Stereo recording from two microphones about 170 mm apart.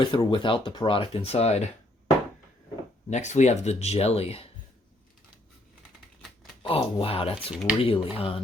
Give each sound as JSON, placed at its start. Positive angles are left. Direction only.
{"t": 0.0, "sound": "speech", "side_deg": 30}
{"t": 3.1, "sound": "speech", "side_deg": 45}
{"t": 6.6, "sound": "speech", "side_deg": 30}
{"t": 7.5, "sound": "speech", "side_deg": -5}
{"t": 7.8, "sound": "speech", "side_deg": 35}